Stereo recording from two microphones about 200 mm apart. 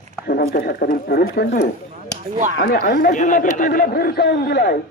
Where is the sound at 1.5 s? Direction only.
35° left (ahead or behind).